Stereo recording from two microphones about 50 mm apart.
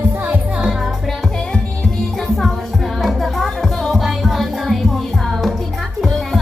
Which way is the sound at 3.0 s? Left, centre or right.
Centre.